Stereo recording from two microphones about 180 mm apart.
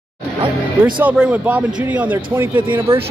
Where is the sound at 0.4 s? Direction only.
25° right (ahead or behind).